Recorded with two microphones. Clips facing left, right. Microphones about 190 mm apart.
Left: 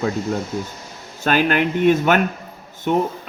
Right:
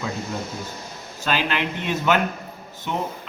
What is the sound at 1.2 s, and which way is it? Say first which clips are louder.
A man's voice: left 6 dB; 50° left (ahead or behind).